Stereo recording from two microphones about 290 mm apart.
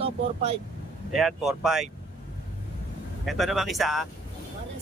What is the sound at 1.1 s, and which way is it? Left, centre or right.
Speech, centre.